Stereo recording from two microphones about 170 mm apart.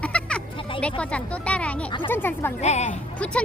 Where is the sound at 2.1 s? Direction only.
10° left (ahead or behind).